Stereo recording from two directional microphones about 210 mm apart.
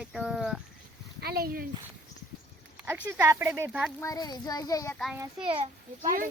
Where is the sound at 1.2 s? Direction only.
45° right (ahead or behind).